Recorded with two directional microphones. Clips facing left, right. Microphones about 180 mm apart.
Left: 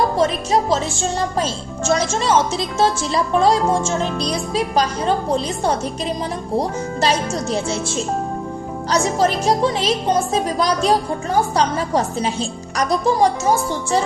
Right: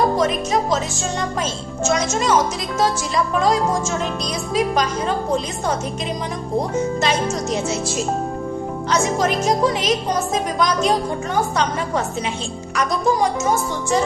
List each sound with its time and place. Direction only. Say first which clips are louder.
0.2 s speech: left 1 dB; 30° left (ahead or behind)
7.0 s speech: left 1 dB; 35° left (ahead or behind)